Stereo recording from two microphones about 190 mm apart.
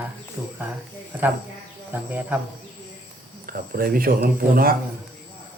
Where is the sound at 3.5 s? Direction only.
50° right (ahead or behind).